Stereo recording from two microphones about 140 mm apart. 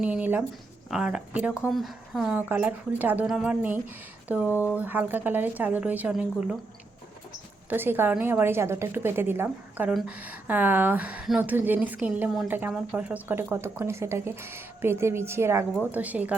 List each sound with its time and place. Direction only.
0.0 s speech: 10° right (ahead or behind)
7.7 s speech: 15° right (ahead or behind)